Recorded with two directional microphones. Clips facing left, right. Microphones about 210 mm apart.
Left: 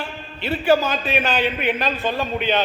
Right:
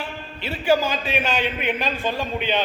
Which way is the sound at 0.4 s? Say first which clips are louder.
Left 2 dB; 10° right (ahead or behind).